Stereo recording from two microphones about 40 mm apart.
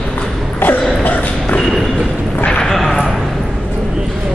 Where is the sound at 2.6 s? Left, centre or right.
Centre.